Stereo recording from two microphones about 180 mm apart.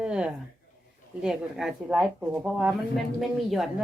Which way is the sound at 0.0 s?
5° right (ahead or behind).